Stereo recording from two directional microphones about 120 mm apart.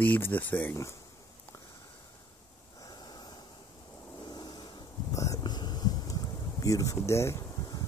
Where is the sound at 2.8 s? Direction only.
35° left (ahead or behind).